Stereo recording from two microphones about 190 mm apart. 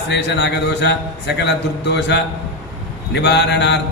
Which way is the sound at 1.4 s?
65° left (ahead or behind).